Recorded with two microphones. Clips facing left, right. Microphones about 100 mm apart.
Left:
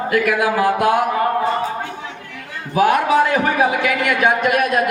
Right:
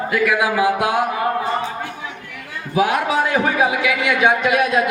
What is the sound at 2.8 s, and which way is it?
Speech, 50° left (ahead or behind).